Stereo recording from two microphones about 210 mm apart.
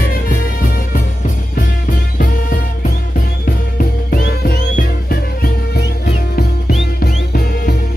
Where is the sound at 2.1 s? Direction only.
40° left (ahead or behind).